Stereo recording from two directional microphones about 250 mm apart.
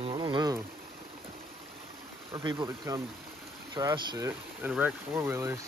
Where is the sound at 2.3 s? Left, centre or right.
Centre.